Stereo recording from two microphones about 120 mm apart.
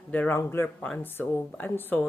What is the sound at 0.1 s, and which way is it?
Speech, 15° left (ahead or behind).